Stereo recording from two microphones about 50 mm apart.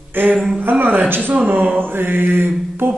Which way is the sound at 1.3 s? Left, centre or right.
Right.